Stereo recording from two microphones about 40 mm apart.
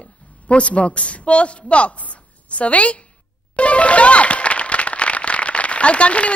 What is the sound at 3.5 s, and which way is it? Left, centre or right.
Music, left.